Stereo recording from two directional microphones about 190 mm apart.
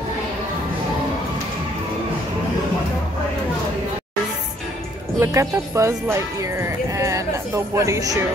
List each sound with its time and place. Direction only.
5.2 s speech: 15° right (ahead or behind)